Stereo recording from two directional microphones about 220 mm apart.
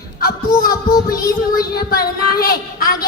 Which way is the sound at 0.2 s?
40° left (ahead or behind).